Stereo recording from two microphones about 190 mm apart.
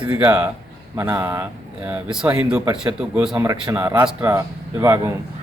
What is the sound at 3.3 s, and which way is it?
Speech, 15° right (ahead or behind).